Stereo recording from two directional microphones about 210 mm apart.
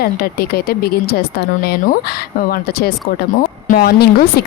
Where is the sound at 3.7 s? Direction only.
45° left (ahead or behind).